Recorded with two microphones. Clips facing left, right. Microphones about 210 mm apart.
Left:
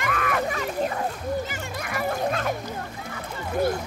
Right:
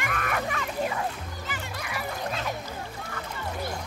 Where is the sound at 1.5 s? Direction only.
50° left (ahead or behind).